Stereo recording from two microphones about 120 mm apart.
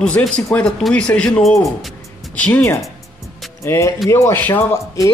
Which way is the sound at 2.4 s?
20° left (ahead or behind).